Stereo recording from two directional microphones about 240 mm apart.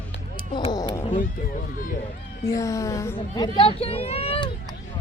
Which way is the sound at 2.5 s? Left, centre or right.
Centre.